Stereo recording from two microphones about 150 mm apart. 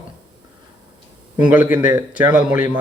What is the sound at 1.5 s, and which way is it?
Speech, 10° right (ahead or behind).